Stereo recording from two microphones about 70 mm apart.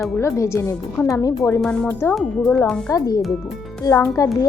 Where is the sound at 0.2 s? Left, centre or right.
Left.